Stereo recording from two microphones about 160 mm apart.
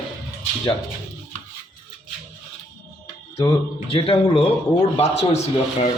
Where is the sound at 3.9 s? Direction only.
35° left (ahead or behind).